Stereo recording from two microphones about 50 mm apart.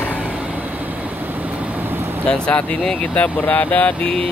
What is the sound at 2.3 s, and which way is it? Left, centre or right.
Speech, left.